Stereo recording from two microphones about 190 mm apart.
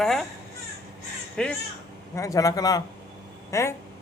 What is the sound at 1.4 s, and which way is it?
Speech, 5° left (ahead or behind).